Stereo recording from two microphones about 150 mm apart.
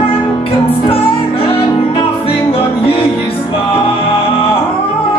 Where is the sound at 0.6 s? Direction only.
40° left (ahead or behind).